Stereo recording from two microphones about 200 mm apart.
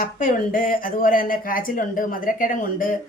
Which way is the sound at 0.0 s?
45° left (ahead or behind).